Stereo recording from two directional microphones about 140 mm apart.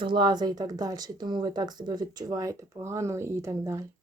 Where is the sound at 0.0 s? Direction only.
35° right (ahead or behind).